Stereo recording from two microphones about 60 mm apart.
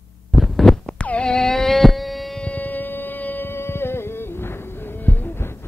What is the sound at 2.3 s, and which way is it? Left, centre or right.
Music, left.